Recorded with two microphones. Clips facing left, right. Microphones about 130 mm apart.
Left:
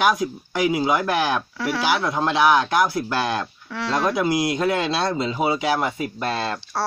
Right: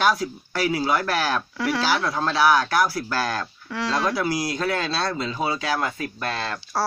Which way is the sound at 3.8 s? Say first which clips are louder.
Left 2 dB; centre (ahead or behind).